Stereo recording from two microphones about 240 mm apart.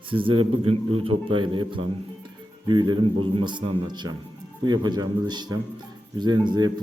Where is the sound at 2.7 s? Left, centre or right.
Centre.